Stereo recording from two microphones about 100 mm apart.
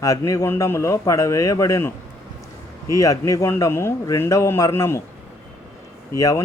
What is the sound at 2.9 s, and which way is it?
Speech, 35° left (ahead or behind).